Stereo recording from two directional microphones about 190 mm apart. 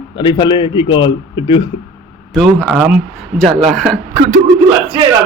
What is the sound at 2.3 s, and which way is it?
A man's voice, centre (ahead or behind).